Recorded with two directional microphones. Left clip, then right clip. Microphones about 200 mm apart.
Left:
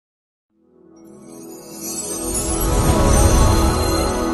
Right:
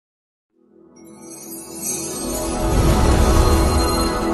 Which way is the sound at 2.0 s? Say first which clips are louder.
Left 1 dB; centre (ahead or behind).